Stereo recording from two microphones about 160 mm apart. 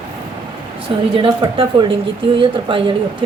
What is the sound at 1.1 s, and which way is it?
A woman's voice, 30° right (ahead or behind).